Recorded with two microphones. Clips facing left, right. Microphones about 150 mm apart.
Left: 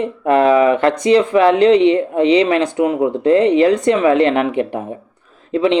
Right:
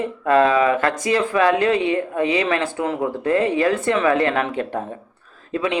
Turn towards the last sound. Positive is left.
turn(degrees=25)  # may be behind; listen again after turning